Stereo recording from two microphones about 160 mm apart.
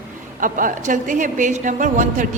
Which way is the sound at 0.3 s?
55° right (ahead or behind).